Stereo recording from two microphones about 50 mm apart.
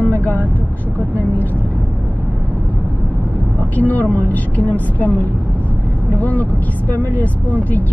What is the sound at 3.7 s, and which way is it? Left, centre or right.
Speech, left.